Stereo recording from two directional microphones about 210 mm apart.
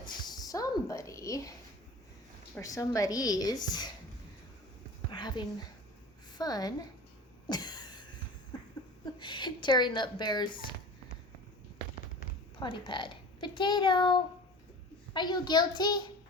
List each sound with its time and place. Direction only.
0.0 s a sound: 20° left (ahead or behind)
2.6 s a woman's voice: 15° left (ahead or behind)
5.1 s a woman's voice: 20° left (ahead or behind)
7.5 s cough: 20° left (ahead or behind)
9.1 s a child's voice: 20° left (ahead or behind)
12.5 s a child's voice: 20° left (ahead or behind)